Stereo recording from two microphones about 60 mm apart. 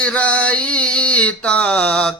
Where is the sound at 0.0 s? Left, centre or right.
Left.